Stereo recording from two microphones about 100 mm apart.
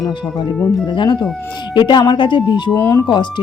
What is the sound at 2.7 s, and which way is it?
Speech, 30° left (ahead or behind).